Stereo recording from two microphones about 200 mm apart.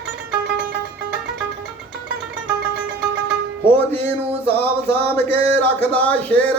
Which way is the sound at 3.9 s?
10° left (ahead or behind).